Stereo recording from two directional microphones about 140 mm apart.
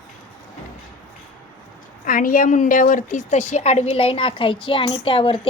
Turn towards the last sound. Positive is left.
turn(degrees=40)  # may be behind; listen again after turning